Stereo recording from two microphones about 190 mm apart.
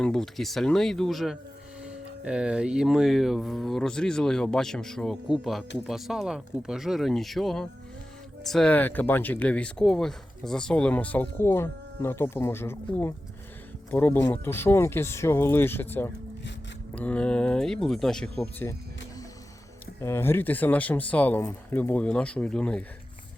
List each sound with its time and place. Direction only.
0.0 s speech: 5° left (ahead or behind)
20.0 s speech: 15° left (ahead or behind)